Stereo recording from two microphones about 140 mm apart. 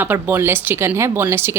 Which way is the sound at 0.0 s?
15° right (ahead or behind).